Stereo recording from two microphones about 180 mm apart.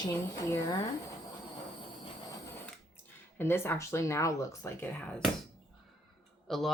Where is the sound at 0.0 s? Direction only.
20° left (ahead or behind).